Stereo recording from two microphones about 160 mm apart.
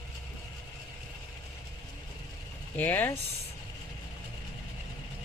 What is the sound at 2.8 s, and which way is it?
Speech, 10° left (ahead or behind).